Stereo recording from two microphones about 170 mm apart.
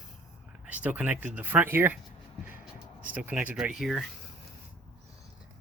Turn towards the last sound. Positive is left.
turn(degrees=0)  # may be behind; listen again after turning